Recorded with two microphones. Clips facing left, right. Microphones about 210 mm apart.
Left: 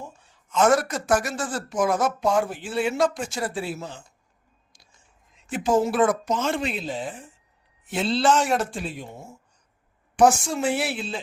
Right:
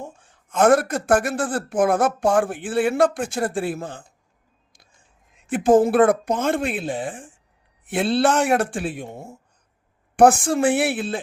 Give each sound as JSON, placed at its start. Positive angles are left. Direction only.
{"t": 0.0, "sound": "speech", "side_deg": -50}